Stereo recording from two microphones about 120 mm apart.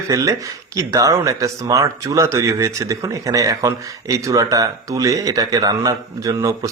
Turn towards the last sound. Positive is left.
turn(degrees=-30)  # may be behind; listen again after turning